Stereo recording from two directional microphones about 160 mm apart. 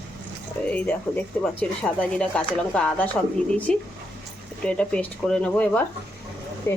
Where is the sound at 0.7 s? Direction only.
10° left (ahead or behind).